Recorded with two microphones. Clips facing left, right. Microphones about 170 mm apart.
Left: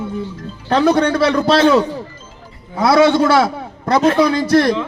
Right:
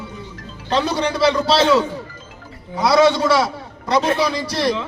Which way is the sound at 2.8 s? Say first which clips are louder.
Left 3 dB; 55° left (ahead or behind).